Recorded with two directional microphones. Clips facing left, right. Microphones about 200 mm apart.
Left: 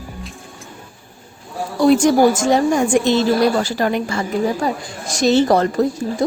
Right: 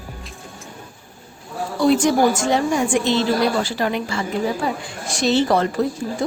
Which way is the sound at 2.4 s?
45° left (ahead or behind).